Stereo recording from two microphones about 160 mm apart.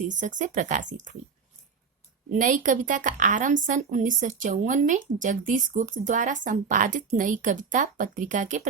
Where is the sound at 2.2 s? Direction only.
55° right (ahead or behind).